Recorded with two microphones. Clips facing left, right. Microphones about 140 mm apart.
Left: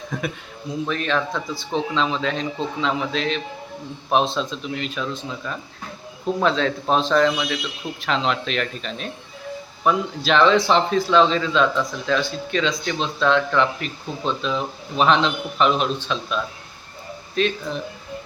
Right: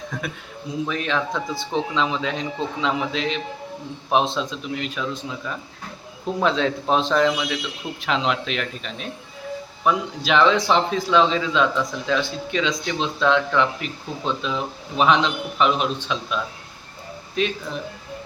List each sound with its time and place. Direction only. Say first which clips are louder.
0.1 s a man's voice: left 4 dB; centre (ahead or behind)
0.9 s speech: left 2 dB; 15° right (ahead or behind)
6.4 s speech: right 1 dB; 15° right (ahead or behind)